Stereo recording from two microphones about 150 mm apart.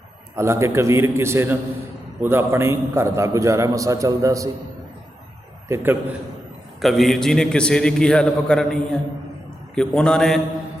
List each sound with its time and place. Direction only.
0.3 s a man's voice: 20° right (ahead or behind)
5.6 s a man's voice: 15° right (ahead or behind)
6.8 s a man's voice: centre (ahead or behind)